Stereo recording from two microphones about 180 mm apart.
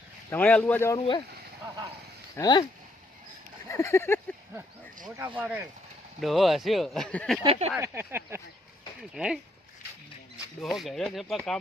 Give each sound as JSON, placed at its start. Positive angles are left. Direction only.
{"t": 0.3, "sound": "speech", "side_deg": 10}
{"t": 0.9, "sound": "speech", "side_deg": 25}
{"t": 2.3, "sound": "speech", "side_deg": 20}
{"t": 3.7, "sound": "speech", "side_deg": 15}
{"t": 5.1, "sound": "a sound", "side_deg": -10}
{"t": 6.1, "sound": "speech", "side_deg": 0}
{"t": 7.4, "sound": "speech", "side_deg": -35}
{"t": 7.8, "sound": "a sound", "side_deg": -15}
{"t": 9.0, "sound": "speech", "side_deg": -5}
{"t": 10.6, "sound": "speech", "side_deg": 0}